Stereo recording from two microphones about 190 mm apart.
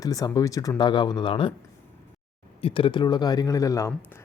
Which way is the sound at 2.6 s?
30° left (ahead or behind).